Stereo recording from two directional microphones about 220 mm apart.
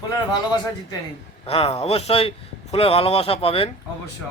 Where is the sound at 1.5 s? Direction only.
25° left (ahead or behind).